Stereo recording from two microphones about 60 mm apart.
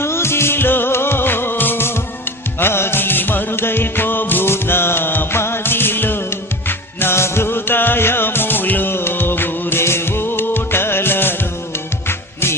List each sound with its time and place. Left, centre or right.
0.0 s music: left